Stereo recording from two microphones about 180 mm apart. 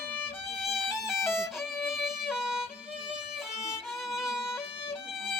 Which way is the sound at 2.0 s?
Centre (ahead or behind).